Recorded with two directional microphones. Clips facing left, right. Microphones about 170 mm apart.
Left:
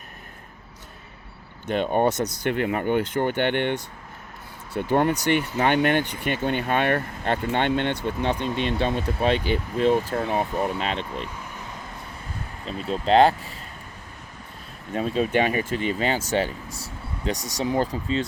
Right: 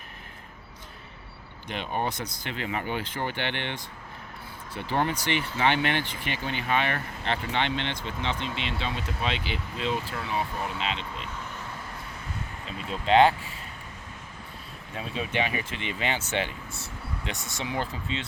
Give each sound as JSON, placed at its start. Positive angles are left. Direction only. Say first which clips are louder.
{"t": 1.7, "sound": "speech", "louder": "left 9 dB", "side_deg": 50}
{"t": 4.8, "sound": "speech", "louder": "left 7 dB", "side_deg": 50}
{"t": 12.6, "sound": "speech", "louder": "left 5 dB", "side_deg": 40}
{"t": 14.9, "sound": "speech", "louder": "left 8 dB", "side_deg": 40}